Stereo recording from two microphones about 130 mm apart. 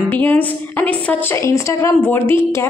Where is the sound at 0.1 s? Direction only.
15° left (ahead or behind).